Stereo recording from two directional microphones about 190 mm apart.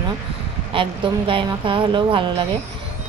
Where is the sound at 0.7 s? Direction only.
25° right (ahead or behind).